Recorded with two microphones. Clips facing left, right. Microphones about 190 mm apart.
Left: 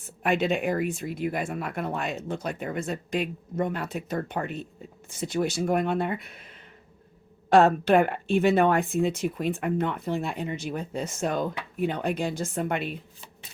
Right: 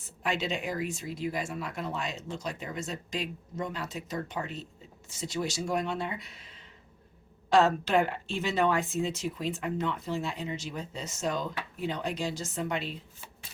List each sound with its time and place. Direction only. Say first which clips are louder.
0.2 s speech: left 7 dB; 55° left (ahead or behind)